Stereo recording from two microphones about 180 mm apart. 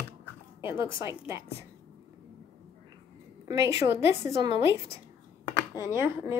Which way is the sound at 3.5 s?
20° right (ahead or behind).